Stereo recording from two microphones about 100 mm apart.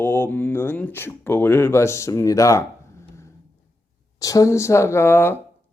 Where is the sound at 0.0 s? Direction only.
20° left (ahead or behind).